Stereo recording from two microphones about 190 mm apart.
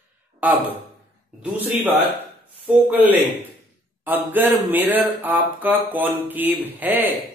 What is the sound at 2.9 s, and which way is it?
A man's voice, 10° right (ahead or behind).